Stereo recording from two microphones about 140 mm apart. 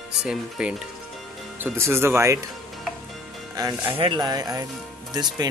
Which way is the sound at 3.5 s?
25° right (ahead or behind).